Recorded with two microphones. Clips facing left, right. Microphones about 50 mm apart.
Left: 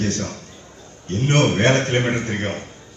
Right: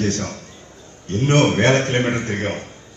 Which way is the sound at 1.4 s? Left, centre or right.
Right.